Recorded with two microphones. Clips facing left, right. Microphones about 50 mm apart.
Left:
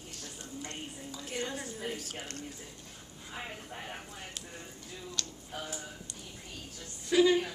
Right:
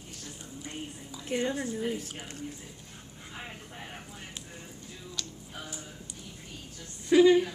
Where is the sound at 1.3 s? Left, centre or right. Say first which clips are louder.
Right 7 dB; centre.